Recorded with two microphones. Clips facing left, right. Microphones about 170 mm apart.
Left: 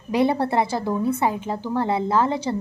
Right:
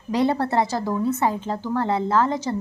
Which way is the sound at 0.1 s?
15° left (ahead or behind).